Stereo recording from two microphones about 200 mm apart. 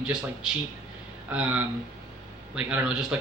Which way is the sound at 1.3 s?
5° right (ahead or behind).